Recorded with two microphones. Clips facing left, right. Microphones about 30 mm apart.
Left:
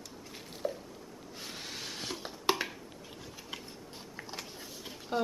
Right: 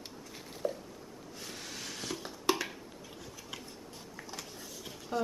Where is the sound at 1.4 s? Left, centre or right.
Left.